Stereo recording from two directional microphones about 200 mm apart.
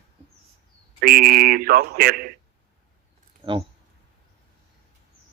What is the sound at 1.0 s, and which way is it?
A man's voice, 50° right (ahead or behind).